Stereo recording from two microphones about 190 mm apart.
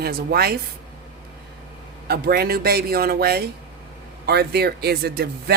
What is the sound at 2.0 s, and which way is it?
Speech, 55° right (ahead or behind).